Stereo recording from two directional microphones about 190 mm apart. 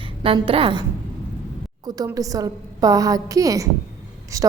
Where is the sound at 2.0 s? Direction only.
20° right (ahead or behind).